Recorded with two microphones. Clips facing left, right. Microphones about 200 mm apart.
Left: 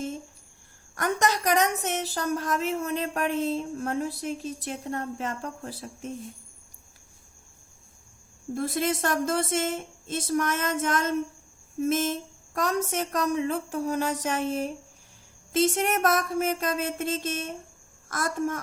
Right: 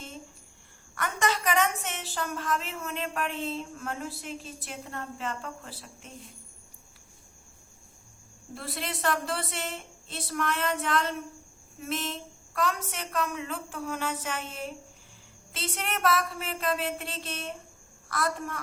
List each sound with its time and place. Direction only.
0.9 s a woman's voice: 40° left (ahead or behind)
8.5 s a woman's voice: 45° left (ahead or behind)